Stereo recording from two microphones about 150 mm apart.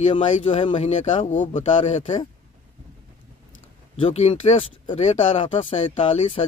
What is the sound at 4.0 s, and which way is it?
Speech, 40° left (ahead or behind).